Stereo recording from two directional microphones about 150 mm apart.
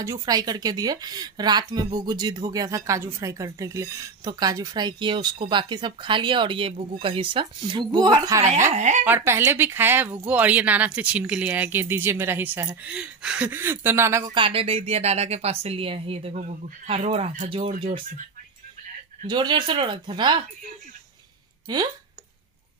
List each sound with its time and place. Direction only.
0.0 s speech: 25° right (ahead or behind)
8.6 s speech: 55° right (ahead or behind)
9.0 s speech: 15° right (ahead or behind)
14.3 s speech: 35° right (ahead or behind)
19.2 s speech: 30° right (ahead or behind)
21.7 s speech: 30° right (ahead or behind)